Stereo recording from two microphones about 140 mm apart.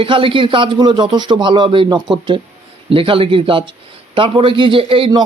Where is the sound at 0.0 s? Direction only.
40° right (ahead or behind).